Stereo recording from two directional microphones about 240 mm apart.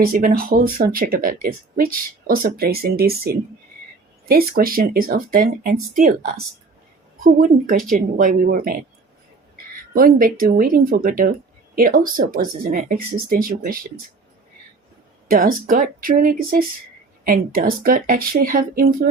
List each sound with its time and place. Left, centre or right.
0.1 s speech: right
4.3 s speech: right
7.2 s speech: right
9.9 s speech: right
15.3 s speech: right